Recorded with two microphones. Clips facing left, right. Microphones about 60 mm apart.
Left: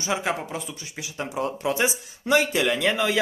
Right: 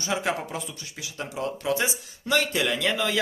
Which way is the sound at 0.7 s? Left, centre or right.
Centre.